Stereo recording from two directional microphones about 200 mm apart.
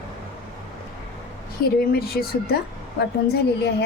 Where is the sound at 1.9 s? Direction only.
50° left (ahead or behind).